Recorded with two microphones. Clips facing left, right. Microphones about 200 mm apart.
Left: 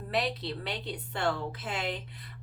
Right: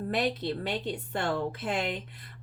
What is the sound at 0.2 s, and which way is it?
Speech, 50° right (ahead or behind).